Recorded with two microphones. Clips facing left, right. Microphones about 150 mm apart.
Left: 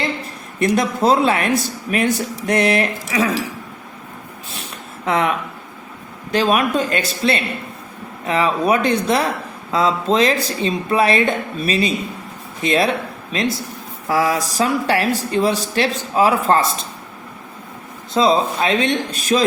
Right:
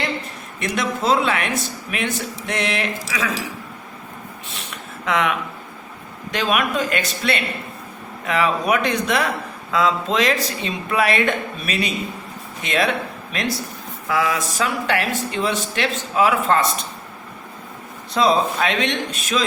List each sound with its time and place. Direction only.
0.6 s speech: 40° left (ahead or behind)
5.0 s speech: 35° left (ahead or behind)
6.3 s speech: 30° left (ahead or behind)
14.1 s speech: 40° left (ahead or behind)
18.1 s speech: 25° left (ahead or behind)